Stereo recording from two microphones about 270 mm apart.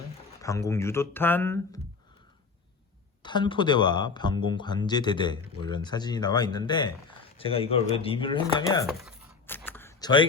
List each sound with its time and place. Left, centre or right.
0.4 s speech: centre
3.2 s speech: centre
8.9 s a sound: centre